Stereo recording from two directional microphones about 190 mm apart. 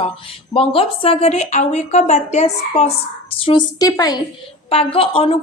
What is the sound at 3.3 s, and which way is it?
Speech, 25° left (ahead or behind).